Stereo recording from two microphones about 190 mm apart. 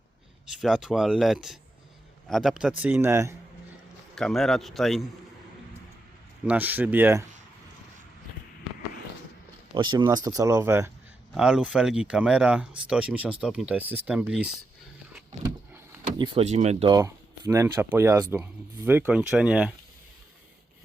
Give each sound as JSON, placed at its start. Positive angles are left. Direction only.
{"t": 0.6, "sound": "speech", "side_deg": -5}
{"t": 4.1, "sound": "speech", "side_deg": 0}
{"t": 6.4, "sound": "speech", "side_deg": -10}
{"t": 9.7, "sound": "speech", "side_deg": -25}
{"t": 16.1, "sound": "speech", "side_deg": -25}
{"t": 16.9, "sound": "speech", "side_deg": -20}